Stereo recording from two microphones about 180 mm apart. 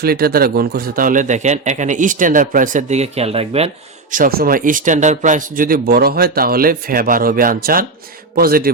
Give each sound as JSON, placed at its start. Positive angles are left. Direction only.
{"t": 0.0, "sound": "speech", "side_deg": -60}
{"t": 4.1, "sound": "a man's voice", "side_deg": -55}